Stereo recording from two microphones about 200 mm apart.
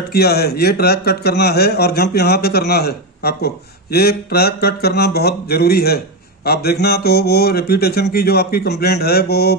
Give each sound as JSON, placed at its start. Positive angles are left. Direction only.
{"t": 0.1, "sound": "speech", "side_deg": 55}